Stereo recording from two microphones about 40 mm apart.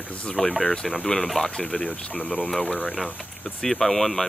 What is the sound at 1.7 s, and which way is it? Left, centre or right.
Speech, left.